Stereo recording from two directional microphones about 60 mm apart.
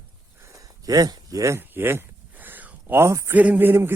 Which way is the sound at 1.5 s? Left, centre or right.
Right.